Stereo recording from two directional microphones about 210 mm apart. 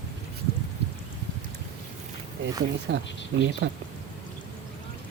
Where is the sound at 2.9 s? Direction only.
60° right (ahead or behind).